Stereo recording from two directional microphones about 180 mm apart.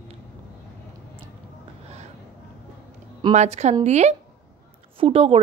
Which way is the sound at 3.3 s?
40° right (ahead or behind).